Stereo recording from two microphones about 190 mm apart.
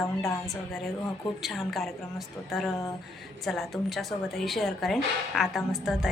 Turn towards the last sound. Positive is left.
turn(degrees=0)  # may be behind; listen again after turning